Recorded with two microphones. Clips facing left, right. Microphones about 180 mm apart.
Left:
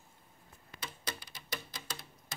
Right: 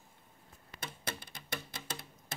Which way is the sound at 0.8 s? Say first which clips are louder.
Right 1 dB; 55° right (ahead or behind).